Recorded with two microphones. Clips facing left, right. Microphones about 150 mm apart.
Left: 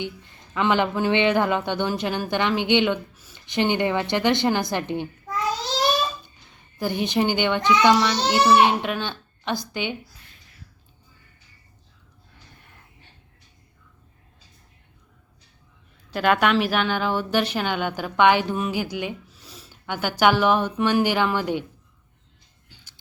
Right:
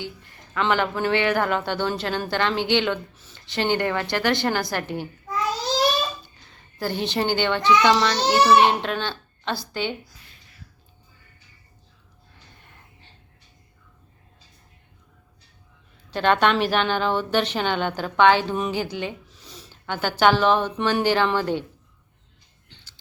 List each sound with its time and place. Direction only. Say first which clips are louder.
0.0 s speech: left 3 dB; 20° left (ahead or behind)
6.7 s speech: left 2 dB; 15° left (ahead or behind)
16.1 s speech: even; 5° left (ahead or behind)